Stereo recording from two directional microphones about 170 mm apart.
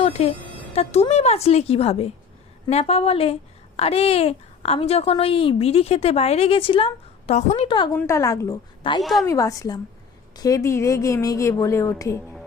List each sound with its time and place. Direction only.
0.0 s music: 35° left (ahead or behind)
0.8 s a woman's voice: 40° left (ahead or behind)
7.9 s a woman's voice: 15° left (ahead or behind)
9.0 s a woman's voice: centre (ahead or behind)
9.2 s a woman's voice: 20° left (ahead or behind)